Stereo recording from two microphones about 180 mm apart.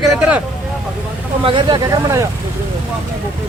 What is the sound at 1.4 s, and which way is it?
Speech, 25° right (ahead or behind).